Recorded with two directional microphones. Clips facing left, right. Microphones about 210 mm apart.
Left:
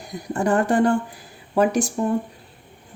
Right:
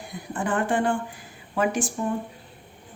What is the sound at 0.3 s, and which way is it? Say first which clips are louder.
Speech: left 6 dB; 40° left (ahead or behind).